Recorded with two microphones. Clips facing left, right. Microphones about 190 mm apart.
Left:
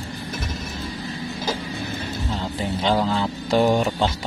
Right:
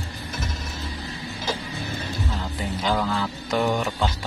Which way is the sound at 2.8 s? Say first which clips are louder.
Left 3 dB; 30° left (ahead or behind).